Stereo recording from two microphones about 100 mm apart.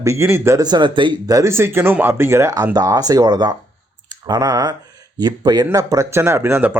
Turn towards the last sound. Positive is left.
turn(degrees=-20)  # may be behind; listen again after turning